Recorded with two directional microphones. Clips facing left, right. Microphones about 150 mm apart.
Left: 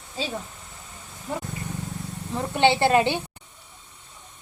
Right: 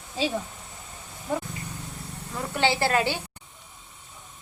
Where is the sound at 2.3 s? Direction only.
20° left (ahead or behind).